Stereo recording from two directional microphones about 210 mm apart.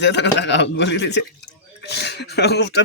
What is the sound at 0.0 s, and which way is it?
A man's voice, 55° left (ahead or behind).